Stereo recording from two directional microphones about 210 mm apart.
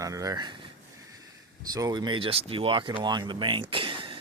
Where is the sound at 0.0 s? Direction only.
15° right (ahead or behind).